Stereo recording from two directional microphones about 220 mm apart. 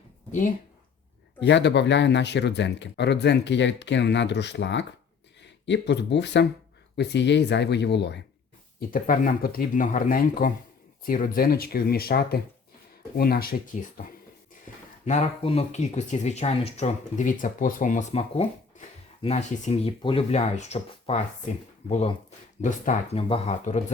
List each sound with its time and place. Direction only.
0.3 s speech: 35° left (ahead or behind)
1.4 s speech: 55° left (ahead or behind)
8.9 s speech: 40° left (ahead or behind)
14.7 s a sound: 35° left (ahead or behind)
15.0 s speech: 30° left (ahead or behind)